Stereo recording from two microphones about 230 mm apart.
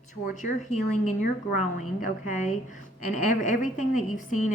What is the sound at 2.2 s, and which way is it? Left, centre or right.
A woman's voice, left.